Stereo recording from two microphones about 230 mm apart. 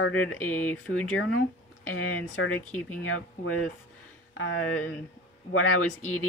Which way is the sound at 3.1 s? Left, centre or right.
Left.